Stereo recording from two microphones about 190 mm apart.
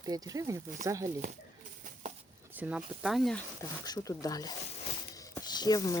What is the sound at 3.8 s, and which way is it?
Speech, 20° left (ahead or behind).